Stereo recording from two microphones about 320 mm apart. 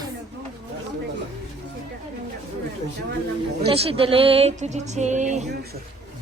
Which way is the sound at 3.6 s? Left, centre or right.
Centre.